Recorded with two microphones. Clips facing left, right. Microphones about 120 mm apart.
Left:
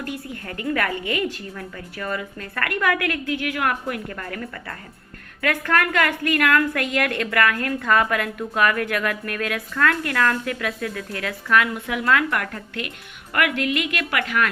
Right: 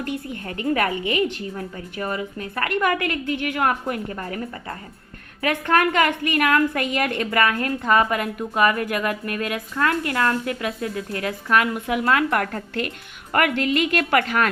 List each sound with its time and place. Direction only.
0.0 s a woman's voice: 20° right (ahead or behind); by 14.5 s 35° right (ahead or behind)